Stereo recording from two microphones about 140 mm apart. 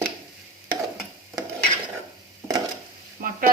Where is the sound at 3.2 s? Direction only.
90° right.